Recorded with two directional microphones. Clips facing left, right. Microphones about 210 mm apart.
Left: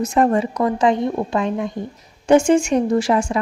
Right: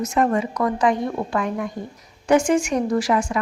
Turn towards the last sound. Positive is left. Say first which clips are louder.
# left 3 dB
turn(degrees=30)  # may be behind; listen again after turning